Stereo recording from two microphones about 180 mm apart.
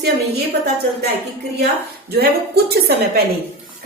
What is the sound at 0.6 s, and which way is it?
Speech, 65° right (ahead or behind).